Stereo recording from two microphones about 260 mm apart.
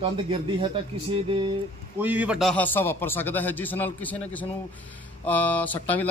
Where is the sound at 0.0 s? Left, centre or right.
Centre.